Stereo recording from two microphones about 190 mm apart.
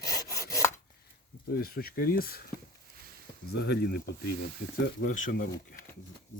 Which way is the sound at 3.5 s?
60° left (ahead or behind).